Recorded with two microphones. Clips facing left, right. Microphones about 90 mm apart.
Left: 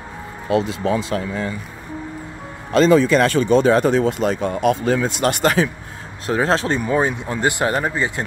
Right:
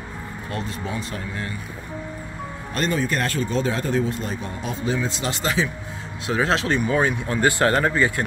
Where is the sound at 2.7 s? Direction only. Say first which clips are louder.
Left 11 dB; 90° left; by 5.6 s 60° left (ahead or behind).